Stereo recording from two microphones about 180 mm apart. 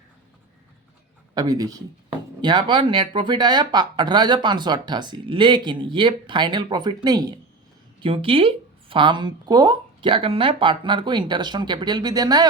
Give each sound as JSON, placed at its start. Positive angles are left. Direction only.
{"t": 1.4, "sound": "speech", "side_deg": -20}